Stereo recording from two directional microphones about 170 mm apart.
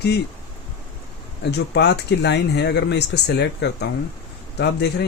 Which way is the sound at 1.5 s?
80° left.